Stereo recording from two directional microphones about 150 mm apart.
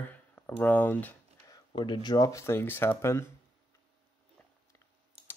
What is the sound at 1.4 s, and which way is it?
Speech, 30° left (ahead or behind).